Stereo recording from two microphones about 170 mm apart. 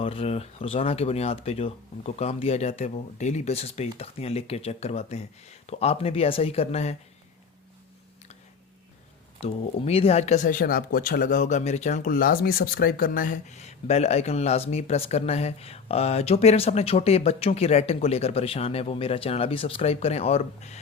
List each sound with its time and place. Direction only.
0.0 s speech: 35° left (ahead or behind)
9.4 s speech: 35° left (ahead or behind)